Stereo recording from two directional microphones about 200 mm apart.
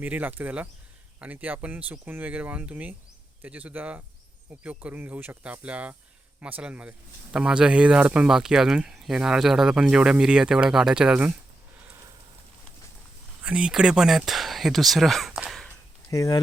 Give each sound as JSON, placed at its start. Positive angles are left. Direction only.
{"t": 0.0, "sound": "speech", "side_deg": -10}
{"t": 13.4, "sound": "speech", "side_deg": -5}
{"t": 16.0, "sound": "speech", "side_deg": 15}